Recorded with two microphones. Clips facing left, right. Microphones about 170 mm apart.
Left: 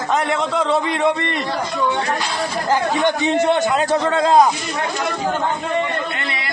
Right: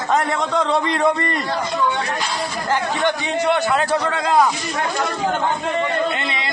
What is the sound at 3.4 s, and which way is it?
A man's voice, 20° left (ahead or behind).